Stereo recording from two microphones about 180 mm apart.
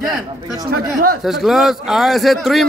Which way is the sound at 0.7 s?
55° right (ahead or behind).